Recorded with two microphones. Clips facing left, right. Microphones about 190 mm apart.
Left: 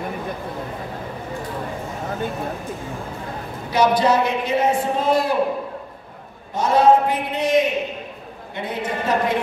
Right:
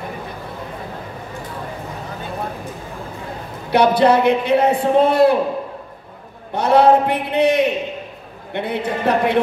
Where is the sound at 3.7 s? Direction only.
60° right (ahead or behind).